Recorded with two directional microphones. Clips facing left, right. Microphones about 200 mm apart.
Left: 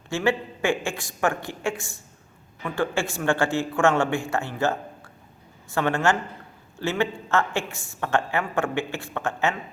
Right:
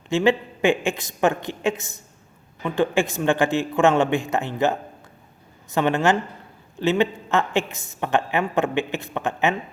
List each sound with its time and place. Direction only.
0.1 s a woman's voice: 20° right (ahead or behind)